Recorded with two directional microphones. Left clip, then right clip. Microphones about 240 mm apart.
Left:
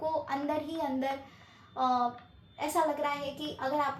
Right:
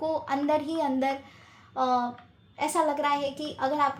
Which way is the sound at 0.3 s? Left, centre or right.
Right.